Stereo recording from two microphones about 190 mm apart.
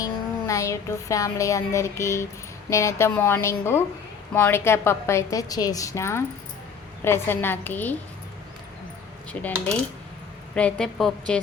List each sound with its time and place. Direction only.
0.0 s a woman's voice: 15° left (ahead or behind)
9.3 s a woman's voice: 5° left (ahead or behind)